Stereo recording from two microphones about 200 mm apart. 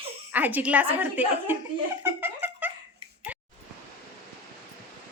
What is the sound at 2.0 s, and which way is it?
Giggle, 10° right (ahead or behind).